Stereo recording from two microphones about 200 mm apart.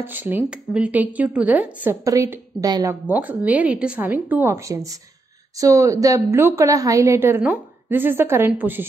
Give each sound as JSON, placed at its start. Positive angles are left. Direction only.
{"t": 0.0, "sound": "speech", "side_deg": -10}